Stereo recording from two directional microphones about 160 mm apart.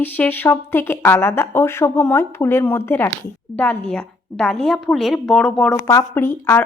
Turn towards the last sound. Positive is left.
turn(degrees=15)  # may be behind; listen again after turning